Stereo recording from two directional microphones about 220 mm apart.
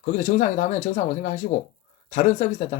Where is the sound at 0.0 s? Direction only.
35° left (ahead or behind).